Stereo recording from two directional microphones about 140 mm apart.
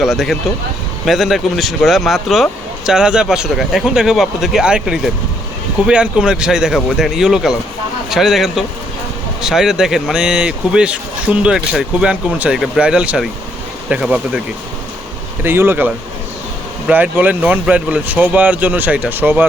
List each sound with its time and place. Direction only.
0.0 s speech: centre (ahead or behind)
15.4 s speech: 15° right (ahead or behind)